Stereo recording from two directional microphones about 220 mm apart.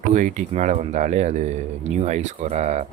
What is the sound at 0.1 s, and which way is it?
Speech, 35° right (ahead or behind).